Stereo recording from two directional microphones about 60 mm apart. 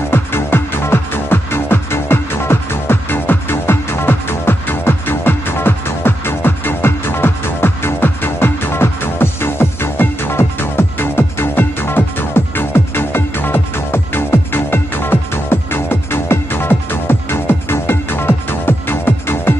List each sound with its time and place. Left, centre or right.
0.1 s music: left